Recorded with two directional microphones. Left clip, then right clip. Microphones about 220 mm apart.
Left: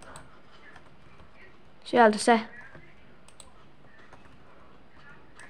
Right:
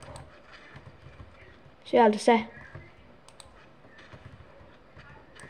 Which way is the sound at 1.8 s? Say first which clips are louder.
Left 1 dB; 15° left (ahead or behind).